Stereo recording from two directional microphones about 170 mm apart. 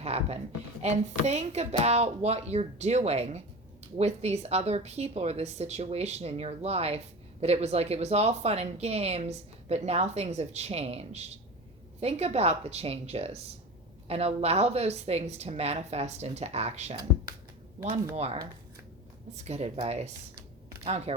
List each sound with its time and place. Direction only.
0.0 s a sound: 40° right (ahead or behind)
0.8 s speech: 40° right (ahead or behind)
19.5 s speech: 40° right (ahead or behind)